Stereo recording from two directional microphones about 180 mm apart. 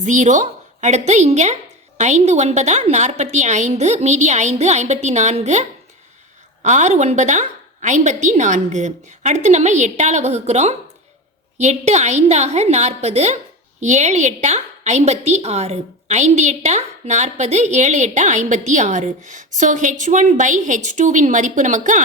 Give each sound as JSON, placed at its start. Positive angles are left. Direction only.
{"t": 0.0, "sound": "a woman's voice", "side_deg": -40}